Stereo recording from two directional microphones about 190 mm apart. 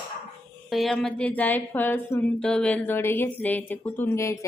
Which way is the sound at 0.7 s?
Centre (ahead or behind).